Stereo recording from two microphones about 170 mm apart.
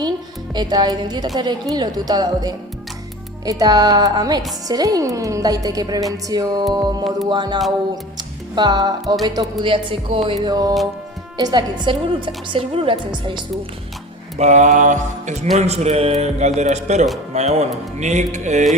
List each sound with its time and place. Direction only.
0.5 s a woman's voice: 25° right (ahead or behind)
14.3 s mantra: 45° right (ahead or behind)
15.5 s speech: 40° right (ahead or behind)
18.0 s mantra: 45° right (ahead or behind)